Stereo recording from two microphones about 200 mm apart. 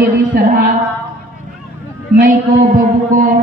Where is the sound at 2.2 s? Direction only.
40° right (ahead or behind).